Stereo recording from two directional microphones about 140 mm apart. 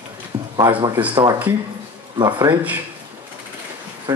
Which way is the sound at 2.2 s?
25° right (ahead or behind).